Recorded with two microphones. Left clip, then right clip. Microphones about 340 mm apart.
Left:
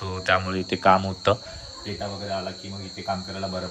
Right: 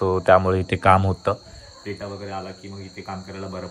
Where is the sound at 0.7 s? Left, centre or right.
Centre.